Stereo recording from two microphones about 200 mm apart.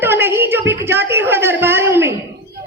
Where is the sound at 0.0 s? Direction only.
10° right (ahead or behind).